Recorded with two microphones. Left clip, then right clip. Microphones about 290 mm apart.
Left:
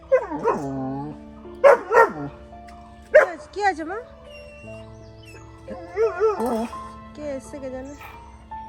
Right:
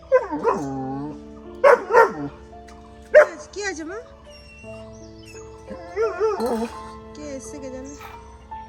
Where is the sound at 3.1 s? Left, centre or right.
Centre.